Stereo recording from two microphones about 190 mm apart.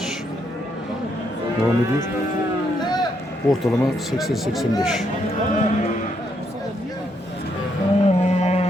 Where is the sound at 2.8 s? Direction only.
20° left (ahead or behind).